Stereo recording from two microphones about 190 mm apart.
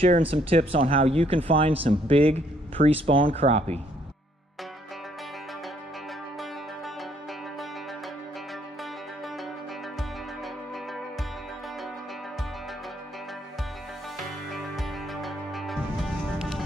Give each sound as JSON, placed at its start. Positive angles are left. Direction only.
{"t": 0.0, "sound": "speech", "side_deg": -30}
{"t": 14.1, "sound": "music", "side_deg": 0}